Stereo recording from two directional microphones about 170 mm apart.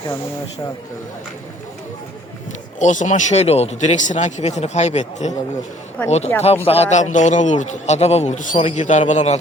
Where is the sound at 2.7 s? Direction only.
45° left (ahead or behind).